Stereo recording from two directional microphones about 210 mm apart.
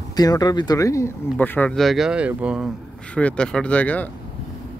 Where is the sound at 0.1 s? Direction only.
20° left (ahead or behind).